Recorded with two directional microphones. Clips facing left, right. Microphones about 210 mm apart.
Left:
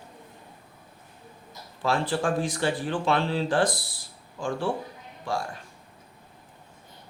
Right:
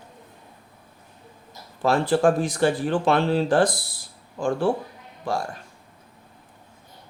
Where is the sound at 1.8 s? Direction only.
45° right (ahead or behind).